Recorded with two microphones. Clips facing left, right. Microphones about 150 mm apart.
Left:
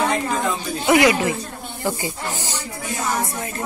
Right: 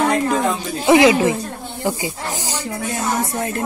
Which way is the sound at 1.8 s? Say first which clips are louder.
Right 2 dB; 15° right (ahead or behind).